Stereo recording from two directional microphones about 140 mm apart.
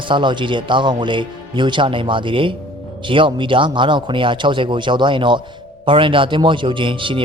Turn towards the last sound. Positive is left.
turn(degrees=-35)  # may be behind; listen again after turning